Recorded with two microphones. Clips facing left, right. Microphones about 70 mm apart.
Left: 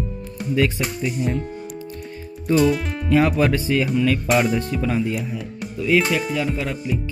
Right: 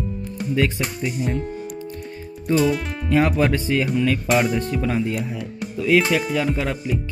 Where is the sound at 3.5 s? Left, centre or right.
Right.